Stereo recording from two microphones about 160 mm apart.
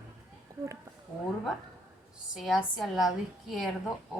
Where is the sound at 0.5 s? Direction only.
20° right (ahead or behind).